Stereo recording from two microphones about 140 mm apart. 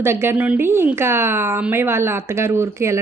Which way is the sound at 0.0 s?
15° right (ahead or behind).